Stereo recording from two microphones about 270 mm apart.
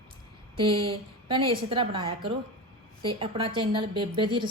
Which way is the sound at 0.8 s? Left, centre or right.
Centre.